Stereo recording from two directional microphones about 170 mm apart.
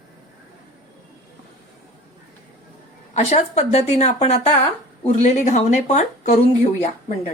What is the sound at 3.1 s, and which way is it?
A woman's voice, 40° left (ahead or behind).